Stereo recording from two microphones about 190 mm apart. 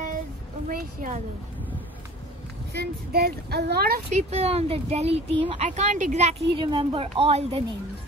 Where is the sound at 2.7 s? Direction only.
55° right (ahead or behind).